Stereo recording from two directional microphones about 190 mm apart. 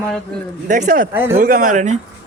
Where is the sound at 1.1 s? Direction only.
10° right (ahead or behind).